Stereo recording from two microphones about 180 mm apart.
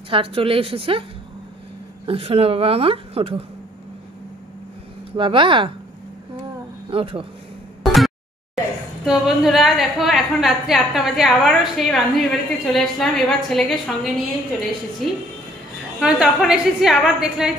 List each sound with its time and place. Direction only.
0.1 s a woman's voice: 30° right (ahead or behind)
2.0 s a woman's voice: 35° right (ahead or behind)
5.1 s speech: 30° right (ahead or behind)
6.9 s a woman's voice: 30° right (ahead or behind)
7.8 s a sound: centre (ahead or behind)
9.0 s a woman's voice: centre (ahead or behind)
16.0 s a woman's voice: 5° right (ahead or behind)